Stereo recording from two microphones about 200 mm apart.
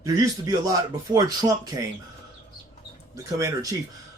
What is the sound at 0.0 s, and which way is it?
Speech, 20° right (ahead or behind).